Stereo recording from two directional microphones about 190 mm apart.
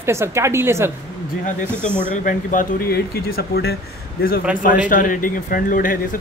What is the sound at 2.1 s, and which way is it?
Speech, 45° left (ahead or behind).